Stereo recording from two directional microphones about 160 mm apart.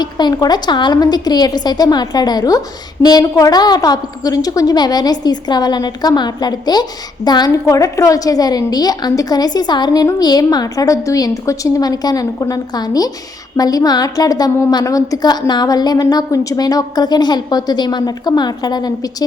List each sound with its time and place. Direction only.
0.0 s a woman's voice: 25° left (ahead or behind)